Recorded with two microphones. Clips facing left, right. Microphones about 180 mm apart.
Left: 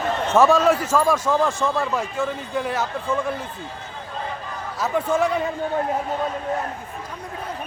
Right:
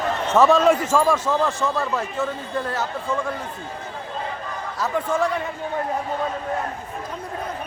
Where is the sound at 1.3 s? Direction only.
Centre (ahead or behind).